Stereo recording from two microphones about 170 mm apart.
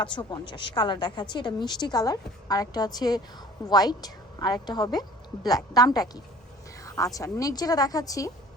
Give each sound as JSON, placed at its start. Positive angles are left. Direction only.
{"t": 0.0, "sound": "a woman's voice", "side_deg": 30}